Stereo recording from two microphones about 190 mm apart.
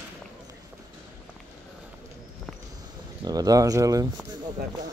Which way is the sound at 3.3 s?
20° right (ahead or behind).